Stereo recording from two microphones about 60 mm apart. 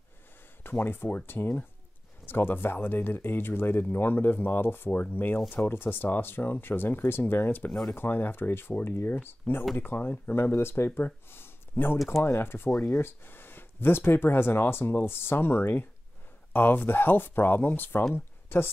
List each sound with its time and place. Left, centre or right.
0.7 s speech: left
11.2 s a sound: left
12.1 s speech: left